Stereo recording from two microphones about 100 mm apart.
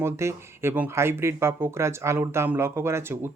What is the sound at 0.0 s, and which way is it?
Speech, 25° right (ahead or behind).